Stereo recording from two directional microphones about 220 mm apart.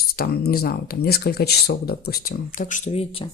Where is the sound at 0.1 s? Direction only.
45° left (ahead or behind).